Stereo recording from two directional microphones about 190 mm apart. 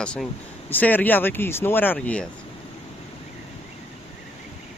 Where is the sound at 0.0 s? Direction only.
5° left (ahead or behind).